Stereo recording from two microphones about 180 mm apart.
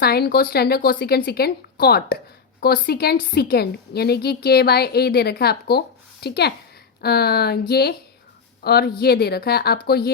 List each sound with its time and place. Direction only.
0.0 s a woman's voice: 60° left (ahead or behind)